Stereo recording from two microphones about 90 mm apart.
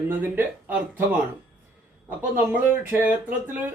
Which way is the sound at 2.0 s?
20° right (ahead or behind).